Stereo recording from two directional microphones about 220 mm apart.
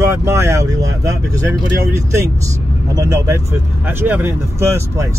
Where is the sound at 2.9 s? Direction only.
15° right (ahead or behind).